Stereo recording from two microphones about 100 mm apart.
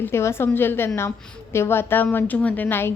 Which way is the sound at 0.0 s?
25° left (ahead or behind).